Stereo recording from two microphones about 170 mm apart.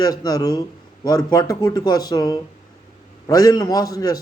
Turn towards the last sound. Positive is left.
turn(degrees=20)  # may be behind; listen again after turning